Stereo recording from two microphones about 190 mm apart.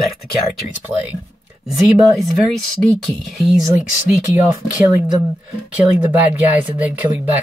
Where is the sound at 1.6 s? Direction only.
Centre (ahead or behind).